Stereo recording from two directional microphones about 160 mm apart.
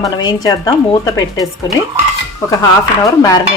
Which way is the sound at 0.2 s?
25° left (ahead or behind).